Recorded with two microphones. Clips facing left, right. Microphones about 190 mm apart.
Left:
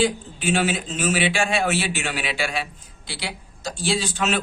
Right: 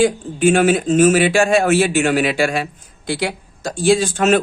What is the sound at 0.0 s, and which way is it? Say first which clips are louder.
Speech: right 8 dB; 50° right (ahead or behind).